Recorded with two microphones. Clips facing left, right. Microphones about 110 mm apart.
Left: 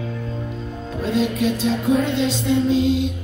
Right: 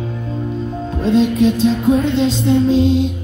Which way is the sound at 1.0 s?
25° right (ahead or behind).